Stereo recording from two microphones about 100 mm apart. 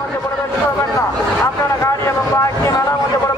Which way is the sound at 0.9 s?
30° left (ahead or behind).